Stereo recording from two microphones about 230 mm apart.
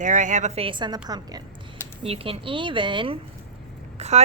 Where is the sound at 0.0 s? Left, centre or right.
Right.